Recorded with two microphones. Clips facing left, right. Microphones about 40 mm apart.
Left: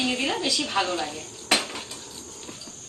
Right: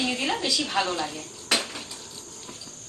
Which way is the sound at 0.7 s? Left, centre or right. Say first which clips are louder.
Left 1 dB; centre.